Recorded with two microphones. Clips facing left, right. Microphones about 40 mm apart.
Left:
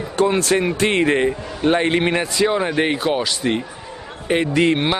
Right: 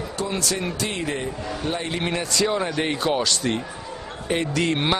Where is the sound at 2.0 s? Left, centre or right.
Left.